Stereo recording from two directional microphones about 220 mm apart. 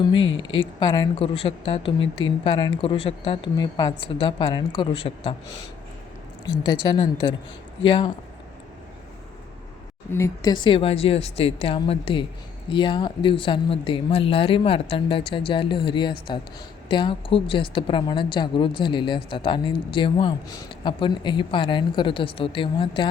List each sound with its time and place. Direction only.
0.2 s speech: 60° left (ahead or behind)
0.6 s a woman's voice: 20° left (ahead or behind)
6.4 s a woman's voice: 20° left (ahead or behind)
10.1 s a woman's voice: 10° left (ahead or behind)